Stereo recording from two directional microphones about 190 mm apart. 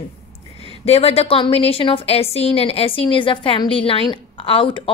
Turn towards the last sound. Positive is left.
turn(degrees=30)  # may be behind; listen again after turning